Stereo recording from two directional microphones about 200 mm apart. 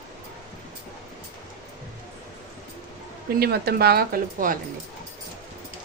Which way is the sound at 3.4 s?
50° right (ahead or behind).